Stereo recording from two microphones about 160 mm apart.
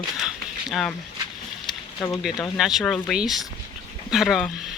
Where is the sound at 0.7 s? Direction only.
5° left (ahead or behind).